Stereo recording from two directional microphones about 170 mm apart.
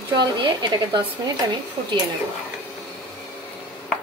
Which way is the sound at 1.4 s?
25° right (ahead or behind).